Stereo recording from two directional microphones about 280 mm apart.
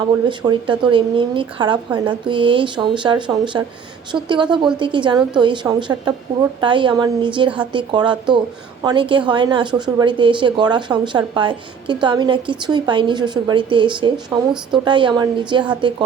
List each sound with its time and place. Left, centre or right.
0.1 s a woman's voice: centre